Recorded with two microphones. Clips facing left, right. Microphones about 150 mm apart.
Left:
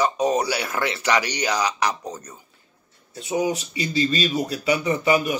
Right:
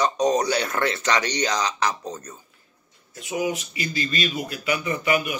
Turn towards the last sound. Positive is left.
turn(degrees=30)  # may be behind; listen again after turning